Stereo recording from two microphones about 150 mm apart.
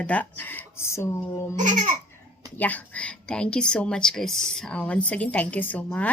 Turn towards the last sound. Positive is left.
turn(degrees=10)  # may be behind; listen again after turning